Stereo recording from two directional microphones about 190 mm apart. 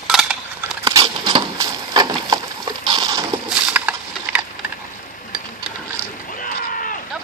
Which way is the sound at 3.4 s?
10° right (ahead or behind).